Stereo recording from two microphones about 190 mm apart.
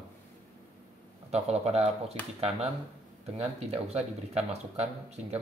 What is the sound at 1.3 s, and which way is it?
Speech, 35° right (ahead or behind).